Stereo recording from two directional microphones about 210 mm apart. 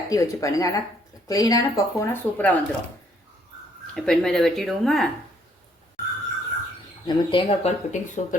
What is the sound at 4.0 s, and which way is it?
Speech, 5° left (ahead or behind).